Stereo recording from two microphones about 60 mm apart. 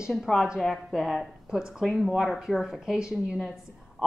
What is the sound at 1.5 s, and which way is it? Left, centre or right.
A woman's voice, centre.